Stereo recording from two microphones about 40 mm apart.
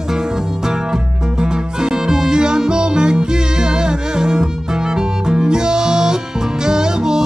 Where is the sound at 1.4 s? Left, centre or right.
Centre.